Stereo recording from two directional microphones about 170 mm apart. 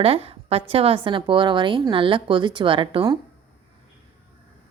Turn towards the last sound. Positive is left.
turn(degrees=-25)  # may be behind; listen again after turning